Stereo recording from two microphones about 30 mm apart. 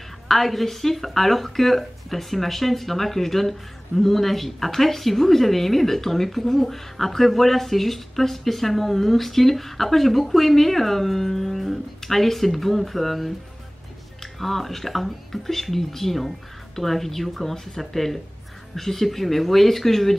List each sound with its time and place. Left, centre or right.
0.3 s speech: centre